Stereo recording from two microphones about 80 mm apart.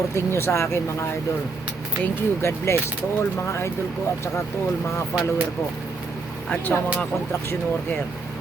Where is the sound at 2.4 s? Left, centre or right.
Left.